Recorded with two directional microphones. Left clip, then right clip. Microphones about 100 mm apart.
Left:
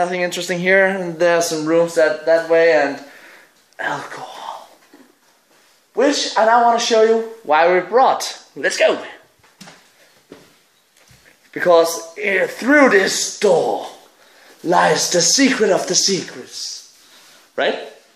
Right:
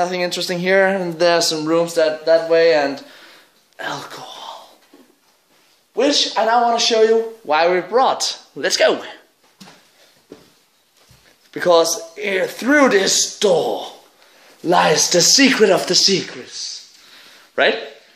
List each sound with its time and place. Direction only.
0.0 s speech: 10° right (ahead or behind)
0.8 s speech: 25° right (ahead or behind)
3.7 s speech: 5° right (ahead or behind)
5.9 s speech: 15° left (ahead or behind); by 8.2 s 5° right (ahead or behind)
8.7 s a man's voice: 90° right
11.5 s speech: 20° right (ahead or behind)
14.6 s speech: 50° right (ahead or behind)
17.6 s speech: 40° right (ahead or behind)